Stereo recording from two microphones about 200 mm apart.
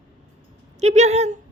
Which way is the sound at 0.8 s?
35° right (ahead or behind).